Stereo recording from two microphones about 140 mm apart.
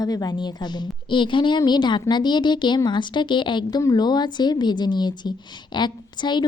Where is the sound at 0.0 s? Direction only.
25° left (ahead or behind).